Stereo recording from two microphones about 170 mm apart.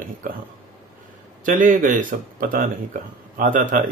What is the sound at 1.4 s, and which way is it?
Speech, 50° right (ahead or behind).